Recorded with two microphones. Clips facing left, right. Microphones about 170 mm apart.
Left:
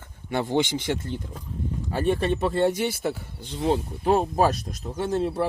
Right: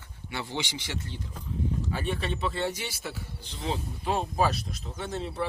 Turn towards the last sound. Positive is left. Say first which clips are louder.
# left 8 dB
turn(degrees=45)  # may be behind; listen again after turning